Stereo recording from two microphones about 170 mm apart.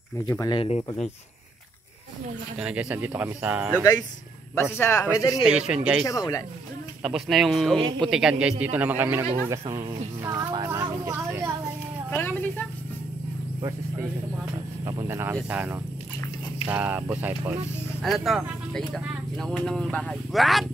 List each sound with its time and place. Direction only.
0.3 s speech: 20° left (ahead or behind)
0.6 s speech: 35° left (ahead or behind)
2.6 s a man's voice: 5° right (ahead or behind)
4.7 s speech: 15° left (ahead or behind)
5.4 s speech: 5° right (ahead or behind)
6.0 s speech: 20° left (ahead or behind)
7.0 s a man's voice: centre (ahead or behind)
12.2 s speech: 10° left (ahead or behind)
14.9 s a man's voice: 15° right (ahead or behind)
18.0 s speech: centre (ahead or behind)